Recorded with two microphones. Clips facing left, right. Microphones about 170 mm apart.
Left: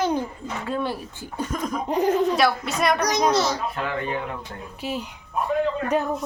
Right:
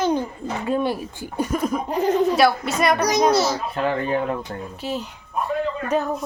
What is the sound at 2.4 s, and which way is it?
A child's voice, centre (ahead or behind).